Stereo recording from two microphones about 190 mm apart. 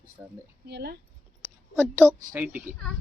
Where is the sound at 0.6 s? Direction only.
60° right (ahead or behind).